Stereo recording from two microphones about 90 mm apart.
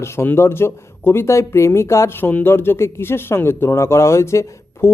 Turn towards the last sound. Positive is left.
turn(degrees=30)  # may be behind; listen again after turning